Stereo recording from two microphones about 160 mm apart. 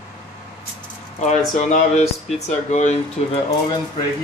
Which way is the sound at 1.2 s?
45° left (ahead or behind).